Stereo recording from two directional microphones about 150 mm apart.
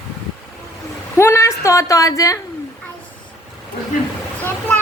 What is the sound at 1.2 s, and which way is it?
A woman's voice, 20° left (ahead or behind).